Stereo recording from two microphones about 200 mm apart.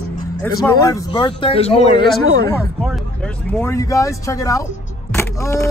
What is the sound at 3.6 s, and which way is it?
Speech, 15° left (ahead or behind).